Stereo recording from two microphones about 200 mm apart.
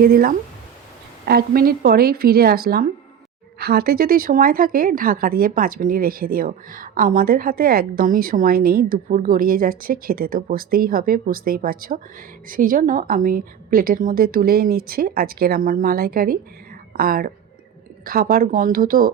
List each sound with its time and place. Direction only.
0.0 s a woman's voice: 45° right (ahead or behind)